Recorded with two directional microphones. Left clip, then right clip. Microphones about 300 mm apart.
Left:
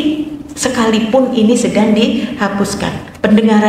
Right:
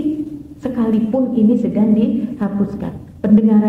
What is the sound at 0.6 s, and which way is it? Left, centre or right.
A woman's voice, centre.